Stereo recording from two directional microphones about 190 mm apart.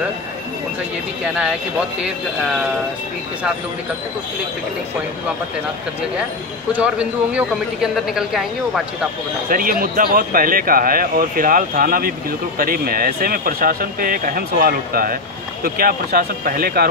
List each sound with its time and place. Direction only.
1.2 s speech: 5° right (ahead or behind)
6.7 s speech: 5° right (ahead or behind)
9.5 s speech: 45° right (ahead or behind)